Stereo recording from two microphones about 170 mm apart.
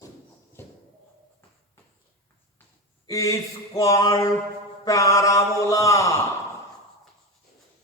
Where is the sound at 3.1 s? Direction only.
20° left (ahead or behind).